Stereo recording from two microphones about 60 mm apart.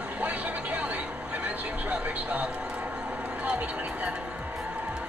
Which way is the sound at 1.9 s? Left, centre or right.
Right.